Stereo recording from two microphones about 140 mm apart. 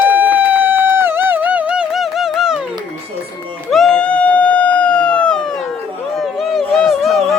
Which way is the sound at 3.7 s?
Centre (ahead or behind).